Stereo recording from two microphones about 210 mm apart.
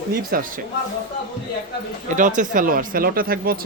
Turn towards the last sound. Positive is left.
turn(degrees=-45)  # may be behind; listen again after turning